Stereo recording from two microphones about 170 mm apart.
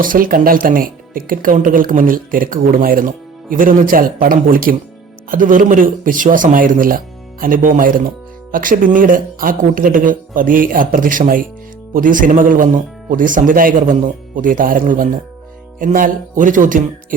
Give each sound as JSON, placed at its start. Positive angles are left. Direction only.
{"t": 0.0, "sound": "speech", "side_deg": -55}